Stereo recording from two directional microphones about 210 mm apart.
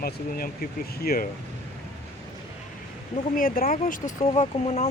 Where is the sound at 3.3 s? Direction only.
40° left (ahead or behind).